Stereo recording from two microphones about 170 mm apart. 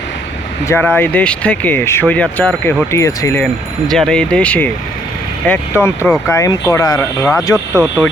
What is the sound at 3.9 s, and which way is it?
Speech, 5° left (ahead or behind).